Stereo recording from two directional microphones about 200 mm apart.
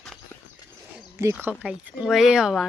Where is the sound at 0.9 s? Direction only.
10° right (ahead or behind).